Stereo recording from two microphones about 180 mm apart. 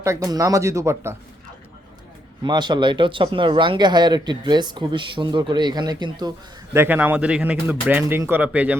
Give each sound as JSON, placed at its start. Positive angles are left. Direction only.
{"t": 0.0, "sound": "speech", "side_deg": -15}
{"t": 2.4, "sound": "speech", "side_deg": -25}
{"t": 6.7, "sound": "speech", "side_deg": -10}